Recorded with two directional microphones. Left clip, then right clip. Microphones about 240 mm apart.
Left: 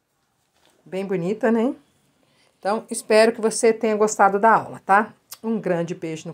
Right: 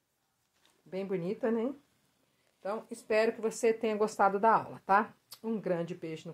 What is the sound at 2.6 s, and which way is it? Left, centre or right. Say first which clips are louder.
A woman's voice: left 13 dB; left.